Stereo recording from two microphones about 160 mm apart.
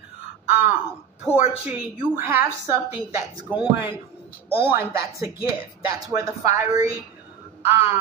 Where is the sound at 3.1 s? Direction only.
15° right (ahead or behind).